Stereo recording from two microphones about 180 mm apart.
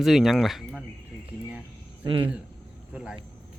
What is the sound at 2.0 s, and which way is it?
Speech, 30° right (ahead or behind).